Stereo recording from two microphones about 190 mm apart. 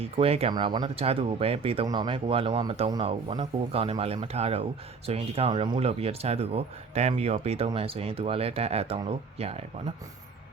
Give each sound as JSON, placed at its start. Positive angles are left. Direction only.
{"t": 0.0, "sound": "speech", "side_deg": -30}